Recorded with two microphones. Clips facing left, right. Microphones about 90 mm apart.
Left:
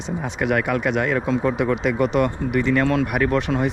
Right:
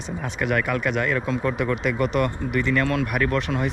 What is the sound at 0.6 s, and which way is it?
Speech, 30° left (ahead or behind).